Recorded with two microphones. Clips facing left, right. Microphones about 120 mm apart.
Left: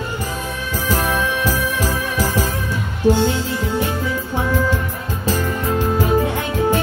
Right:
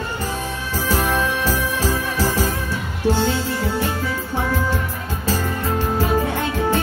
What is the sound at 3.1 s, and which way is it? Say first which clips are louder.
Speech: left 2 dB; 15° left (ahead or behind).